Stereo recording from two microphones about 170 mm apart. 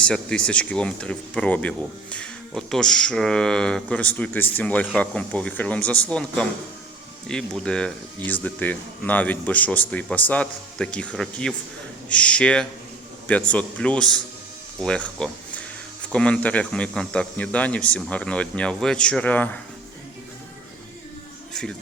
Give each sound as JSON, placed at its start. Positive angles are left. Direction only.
{"t": 0.0, "sound": "speech", "side_deg": 5}